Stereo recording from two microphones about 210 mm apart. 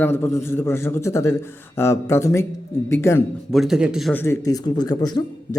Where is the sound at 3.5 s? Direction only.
Centre (ahead or behind).